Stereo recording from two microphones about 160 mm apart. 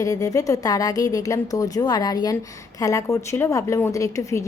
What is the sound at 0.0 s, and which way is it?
Speech, 20° left (ahead or behind).